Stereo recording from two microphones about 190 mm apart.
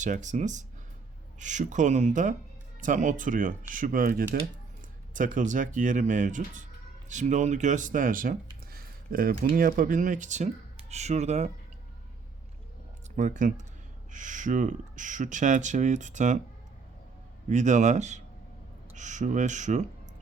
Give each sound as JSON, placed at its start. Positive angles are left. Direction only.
{"t": 0.0, "sound": "speech", "side_deg": -40}
{"t": 13.1, "sound": "speech", "side_deg": -40}
{"t": 17.5, "sound": "speech", "side_deg": -40}